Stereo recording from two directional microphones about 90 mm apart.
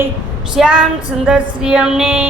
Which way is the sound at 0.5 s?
10° right (ahead or behind).